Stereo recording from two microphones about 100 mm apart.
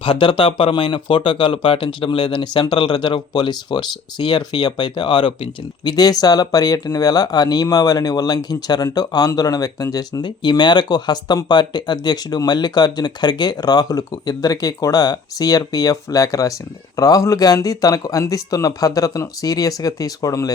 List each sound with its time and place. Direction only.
0.0 s speech: 60° left (ahead or behind); by 20.5 s 35° left (ahead or behind)